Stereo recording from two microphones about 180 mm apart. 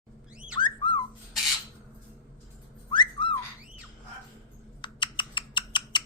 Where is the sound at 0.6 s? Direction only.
30° left (ahead or behind).